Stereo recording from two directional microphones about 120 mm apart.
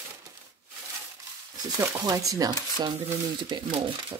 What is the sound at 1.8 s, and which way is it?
Speech, 25° right (ahead or behind).